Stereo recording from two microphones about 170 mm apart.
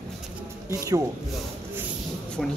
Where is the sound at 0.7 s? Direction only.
20° right (ahead or behind).